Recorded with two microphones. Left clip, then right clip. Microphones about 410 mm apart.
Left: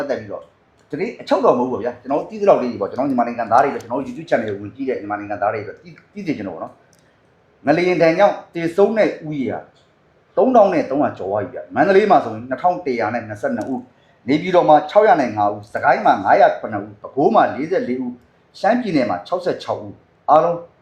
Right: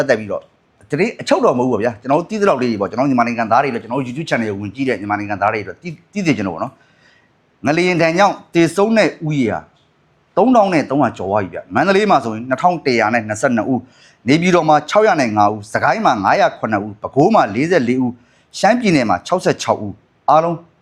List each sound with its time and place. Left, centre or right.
0.0 s speech: right